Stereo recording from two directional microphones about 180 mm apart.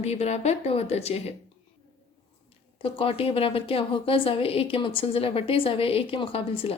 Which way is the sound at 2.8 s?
30° left (ahead or behind).